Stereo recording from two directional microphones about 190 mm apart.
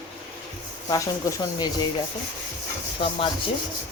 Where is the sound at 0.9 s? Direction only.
20° left (ahead or behind).